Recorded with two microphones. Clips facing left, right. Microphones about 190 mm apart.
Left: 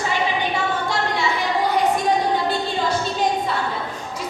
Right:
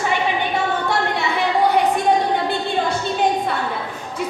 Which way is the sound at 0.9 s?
60° right (ahead or behind).